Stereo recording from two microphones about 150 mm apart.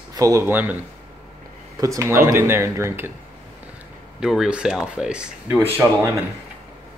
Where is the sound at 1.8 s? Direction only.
20° right (ahead or behind).